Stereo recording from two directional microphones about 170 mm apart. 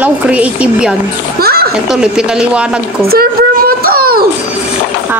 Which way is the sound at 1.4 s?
65° right (ahead or behind).